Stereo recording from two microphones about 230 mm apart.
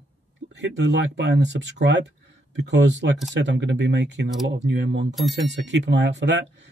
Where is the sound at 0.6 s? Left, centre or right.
Right.